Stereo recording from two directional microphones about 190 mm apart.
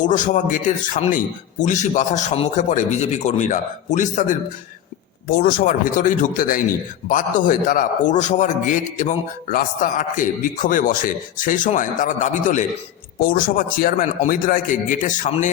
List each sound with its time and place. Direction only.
0.0 s a man's voice: 40° left (ahead or behind)
5.4 s a man's voice: 45° left (ahead or behind)